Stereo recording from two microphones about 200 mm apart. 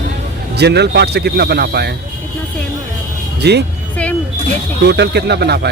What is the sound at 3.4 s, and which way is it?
Speech, 55° right (ahead or behind).